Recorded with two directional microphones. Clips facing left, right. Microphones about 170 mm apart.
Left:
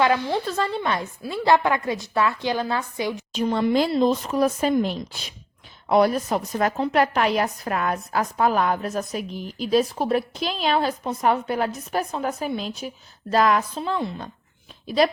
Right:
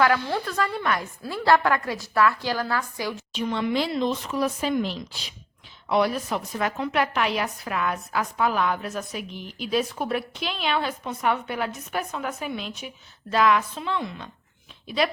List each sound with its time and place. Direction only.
0.0 s a woman's voice: 20° left (ahead or behind)
3.3 s a woman's voice: 40° left (ahead or behind)